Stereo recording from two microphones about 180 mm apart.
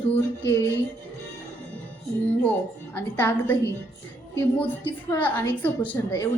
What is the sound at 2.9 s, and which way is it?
Speech, 10° left (ahead or behind).